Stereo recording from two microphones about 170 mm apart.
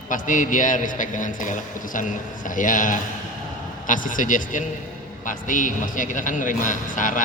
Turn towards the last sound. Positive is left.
turn(degrees=50)  # may be behind; listen again after turning